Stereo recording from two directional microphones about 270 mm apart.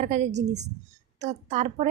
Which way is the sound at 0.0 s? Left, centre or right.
Right.